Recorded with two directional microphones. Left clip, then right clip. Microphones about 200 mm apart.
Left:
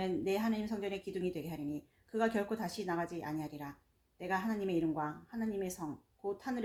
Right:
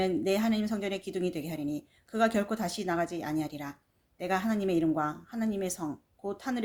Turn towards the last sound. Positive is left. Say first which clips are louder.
# right 4 dB
turn(degrees=-40)  # may be behind; listen again after turning